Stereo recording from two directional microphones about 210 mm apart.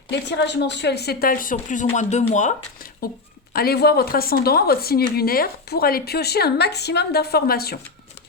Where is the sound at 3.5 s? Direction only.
45° left (ahead or behind).